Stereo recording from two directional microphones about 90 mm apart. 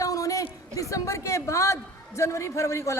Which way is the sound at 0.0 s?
40° left (ahead or behind).